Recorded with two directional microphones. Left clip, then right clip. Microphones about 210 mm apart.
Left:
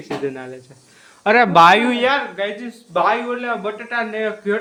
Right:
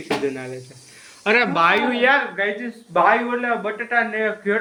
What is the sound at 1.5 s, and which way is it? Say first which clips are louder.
Speech: left 7 dB; 50° left (ahead or behind).